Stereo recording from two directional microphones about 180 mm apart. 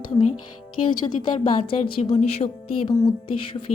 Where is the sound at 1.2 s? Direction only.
25° left (ahead or behind).